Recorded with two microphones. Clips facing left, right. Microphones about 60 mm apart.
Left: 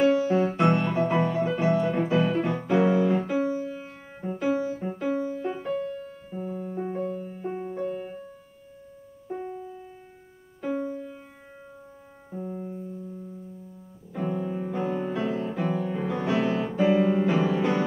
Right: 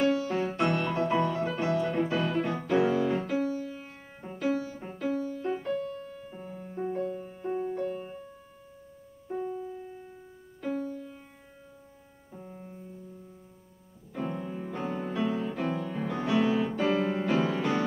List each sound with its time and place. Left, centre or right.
0.6 s music: centre
2.8 s music: left
3.1 s music: centre
3.7 s music: centre
5.1 s music: left
5.5 s music: centre
5.8 s music: left
6.2 s music: centre
9.3 s music: left
9.6 s music: centre
10.7 s music: left
12.4 s piano: centre
14.1 s music: centre